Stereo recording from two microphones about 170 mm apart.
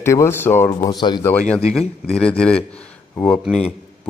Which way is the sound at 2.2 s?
5° left (ahead or behind).